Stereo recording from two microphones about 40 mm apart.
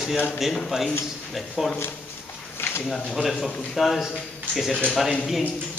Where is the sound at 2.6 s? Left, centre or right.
Left.